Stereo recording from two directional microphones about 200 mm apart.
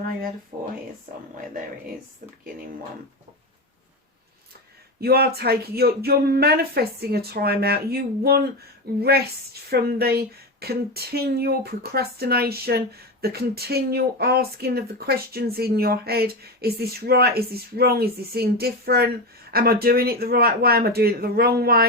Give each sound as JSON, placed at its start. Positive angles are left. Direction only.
{"t": 4.9, "sound": "speech", "side_deg": -50}